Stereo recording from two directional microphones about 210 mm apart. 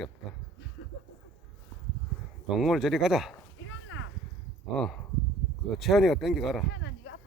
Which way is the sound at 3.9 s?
65° left (ahead or behind).